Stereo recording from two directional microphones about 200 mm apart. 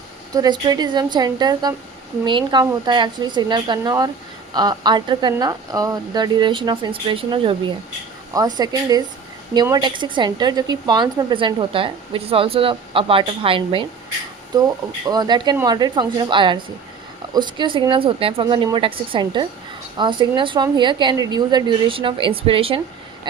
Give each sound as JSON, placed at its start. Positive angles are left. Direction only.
{"t": 0.3, "sound": "a woman's voice", "side_deg": -20}
{"t": 15.0, "sound": "a woman's voice", "side_deg": -20}
{"t": 23.3, "sound": "vehicle", "side_deg": -20}